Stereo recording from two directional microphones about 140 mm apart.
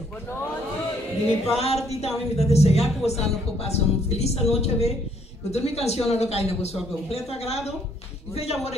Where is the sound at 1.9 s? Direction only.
50° left (ahead or behind).